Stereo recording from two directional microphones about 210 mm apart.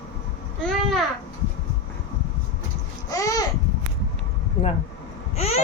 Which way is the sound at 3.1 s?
15° left (ahead or behind).